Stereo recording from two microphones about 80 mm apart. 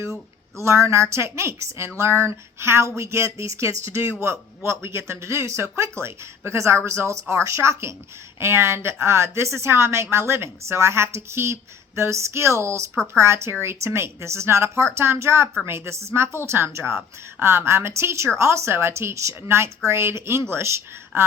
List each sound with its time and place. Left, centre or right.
0.5 s a woman's voice: right